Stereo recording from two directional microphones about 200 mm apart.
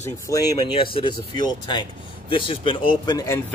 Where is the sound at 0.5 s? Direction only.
25° left (ahead or behind).